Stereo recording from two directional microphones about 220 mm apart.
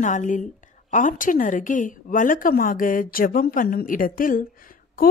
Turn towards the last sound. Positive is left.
turn(degrees=40)  # may be behind; listen again after turning